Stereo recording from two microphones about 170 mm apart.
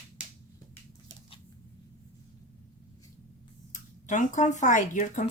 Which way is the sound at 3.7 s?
45° left (ahead or behind).